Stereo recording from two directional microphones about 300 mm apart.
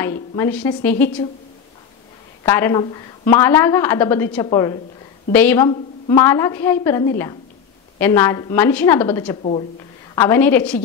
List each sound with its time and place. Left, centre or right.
0.0 s a woman's voice: centre
2.4 s a woman's voice: centre
9.4 s speech: left
10.1 s a woman's voice: centre